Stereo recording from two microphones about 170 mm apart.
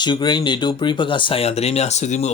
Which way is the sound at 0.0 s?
25° left (ahead or behind).